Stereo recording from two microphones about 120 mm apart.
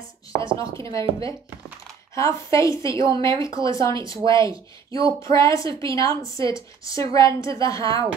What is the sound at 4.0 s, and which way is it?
Speech, 45° right (ahead or behind).